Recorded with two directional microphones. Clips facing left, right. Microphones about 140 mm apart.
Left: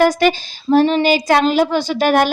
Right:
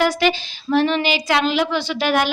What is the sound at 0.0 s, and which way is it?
Speech, 45° left (ahead or behind).